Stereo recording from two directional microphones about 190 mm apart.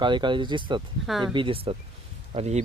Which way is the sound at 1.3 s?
25° right (ahead or behind).